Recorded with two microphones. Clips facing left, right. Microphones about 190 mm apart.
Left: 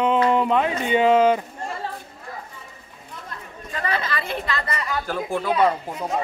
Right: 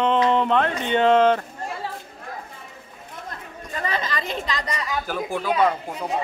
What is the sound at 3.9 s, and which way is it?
Speech, 20° right (ahead or behind).